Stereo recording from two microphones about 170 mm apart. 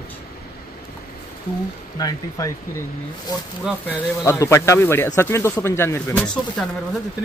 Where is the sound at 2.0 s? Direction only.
20° left (ahead or behind).